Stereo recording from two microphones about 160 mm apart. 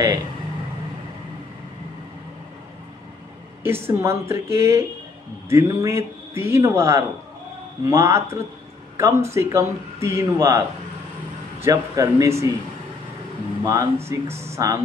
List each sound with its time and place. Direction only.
3.6 s speech: 15° right (ahead or behind)
11.6 s speech: 20° right (ahead or behind)
13.7 s speech: 20° right (ahead or behind)